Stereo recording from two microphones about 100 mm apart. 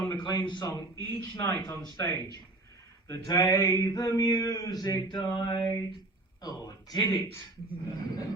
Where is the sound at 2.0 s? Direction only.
30° left (ahead or behind).